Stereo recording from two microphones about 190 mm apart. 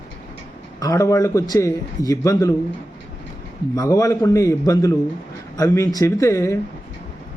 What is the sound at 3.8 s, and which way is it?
A man's voice, 15° left (ahead or behind).